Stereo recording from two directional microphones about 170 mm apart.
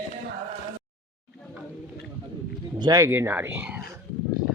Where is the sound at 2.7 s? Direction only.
20° right (ahead or behind).